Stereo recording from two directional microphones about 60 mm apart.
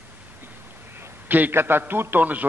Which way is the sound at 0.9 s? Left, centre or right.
Right.